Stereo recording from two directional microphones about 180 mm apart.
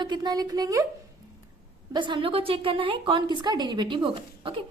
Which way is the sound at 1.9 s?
25° right (ahead or behind).